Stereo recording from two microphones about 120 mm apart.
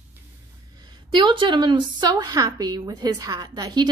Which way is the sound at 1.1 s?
40° right (ahead or behind).